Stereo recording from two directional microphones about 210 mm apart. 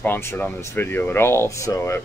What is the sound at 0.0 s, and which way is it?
Speech, 10° left (ahead or behind).